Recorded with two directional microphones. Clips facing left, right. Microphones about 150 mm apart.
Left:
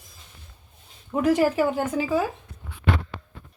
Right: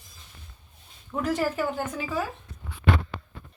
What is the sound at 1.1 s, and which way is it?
Speech, 15° left (ahead or behind).